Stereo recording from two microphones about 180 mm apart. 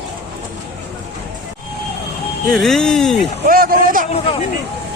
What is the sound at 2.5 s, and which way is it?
Speech, 5° left (ahead or behind).